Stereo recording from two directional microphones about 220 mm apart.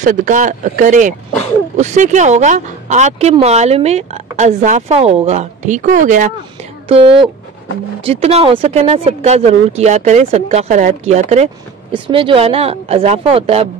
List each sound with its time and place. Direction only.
0.0 s speech: 35° right (ahead or behind)
6.9 s speech: 25° right (ahead or behind)